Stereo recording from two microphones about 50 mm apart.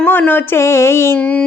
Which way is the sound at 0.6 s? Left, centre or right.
Left.